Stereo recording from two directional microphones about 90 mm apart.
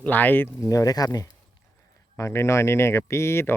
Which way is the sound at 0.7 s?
40° left (ahead or behind).